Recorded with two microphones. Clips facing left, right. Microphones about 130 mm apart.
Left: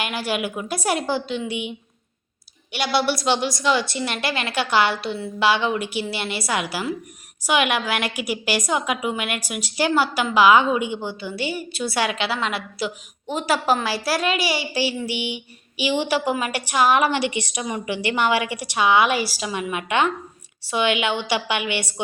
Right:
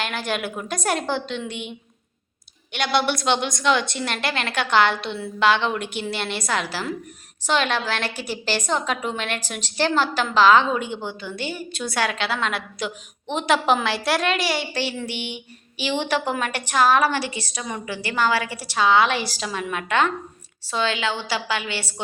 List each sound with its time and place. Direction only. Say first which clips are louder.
0.0 s a woman's voice: left 1 dB; 10° left (ahead or behind)
2.7 s a woman's voice: even; 5° left (ahead or behind)